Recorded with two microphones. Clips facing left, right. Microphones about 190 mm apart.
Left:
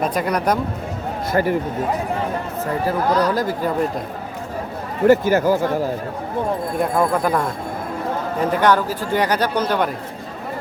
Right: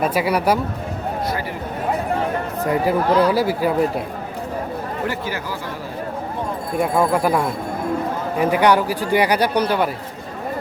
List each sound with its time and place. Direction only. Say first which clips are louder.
0.0 s speech: right 1 dB; 5° right (ahead or behind)
1.3 s speech: left 7 dB; 50° left (ahead or behind)
2.6 s speech: right 2 dB; 10° right (ahead or behind)
5.0 s speech: left 16 dB; 45° left (ahead or behind)
6.7 s speech: right 3 dB; 5° right (ahead or behind)